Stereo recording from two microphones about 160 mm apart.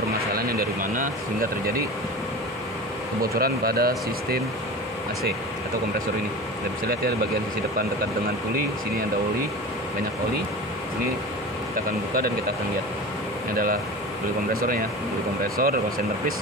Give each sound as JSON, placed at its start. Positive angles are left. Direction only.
{"t": 0.5, "sound": "a sound", "side_deg": -65}
{"t": 3.3, "sound": "speech", "side_deg": -70}
{"t": 14.5, "sound": "speech", "side_deg": -65}